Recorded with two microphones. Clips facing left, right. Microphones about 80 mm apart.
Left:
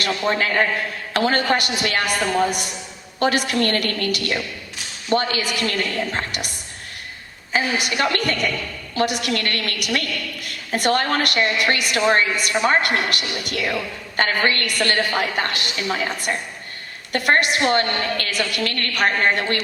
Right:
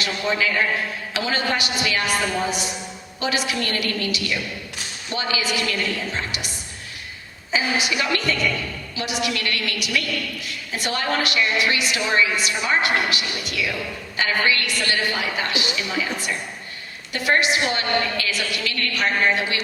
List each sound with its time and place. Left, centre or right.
0.0 s a woman's voice: left
7.5 s a woman's voice: left